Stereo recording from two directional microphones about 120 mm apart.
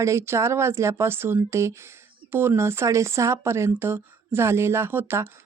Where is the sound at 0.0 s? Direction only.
25° right (ahead or behind).